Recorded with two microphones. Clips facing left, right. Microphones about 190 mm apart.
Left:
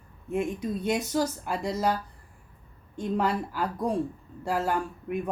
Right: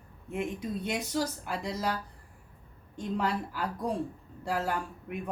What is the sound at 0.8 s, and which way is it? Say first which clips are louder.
Speech: left 5 dB; 45° left (ahead or behind).